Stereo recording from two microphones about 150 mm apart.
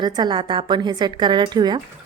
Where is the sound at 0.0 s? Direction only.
30° right (ahead or behind).